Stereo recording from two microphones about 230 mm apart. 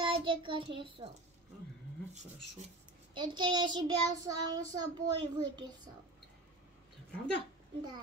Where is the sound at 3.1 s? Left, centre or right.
Centre.